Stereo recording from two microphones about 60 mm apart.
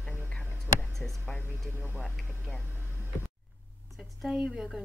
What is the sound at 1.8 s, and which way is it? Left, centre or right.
Speech, left.